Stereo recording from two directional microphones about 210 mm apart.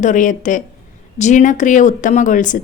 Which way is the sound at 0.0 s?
35° left (ahead or behind).